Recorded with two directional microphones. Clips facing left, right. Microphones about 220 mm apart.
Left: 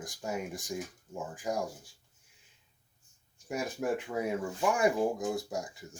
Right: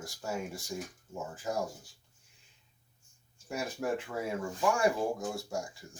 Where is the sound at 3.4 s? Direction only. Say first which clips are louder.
Left 2 dB; 15° left (ahead or behind).